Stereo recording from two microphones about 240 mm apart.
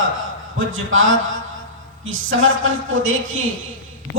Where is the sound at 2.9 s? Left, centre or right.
Right.